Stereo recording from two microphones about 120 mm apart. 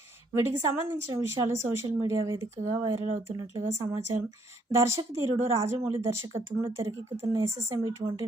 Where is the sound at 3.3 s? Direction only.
30° right (ahead or behind).